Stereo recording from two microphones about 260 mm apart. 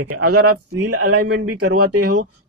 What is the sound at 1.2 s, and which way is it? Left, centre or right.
Speech, right.